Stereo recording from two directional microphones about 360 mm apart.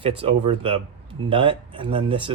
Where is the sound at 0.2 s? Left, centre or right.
Centre.